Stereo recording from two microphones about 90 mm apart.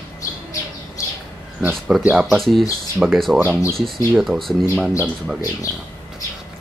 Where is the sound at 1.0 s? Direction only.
35° left (ahead or behind).